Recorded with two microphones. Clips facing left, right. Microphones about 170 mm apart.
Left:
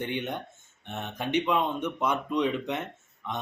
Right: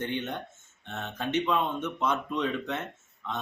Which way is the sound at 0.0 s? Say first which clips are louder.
Left 1 dB; 15° left (ahead or behind).